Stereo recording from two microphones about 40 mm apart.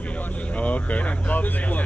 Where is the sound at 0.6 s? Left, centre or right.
Left.